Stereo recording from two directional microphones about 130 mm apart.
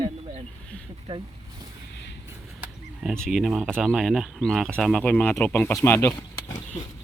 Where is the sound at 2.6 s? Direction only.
5° right (ahead or behind).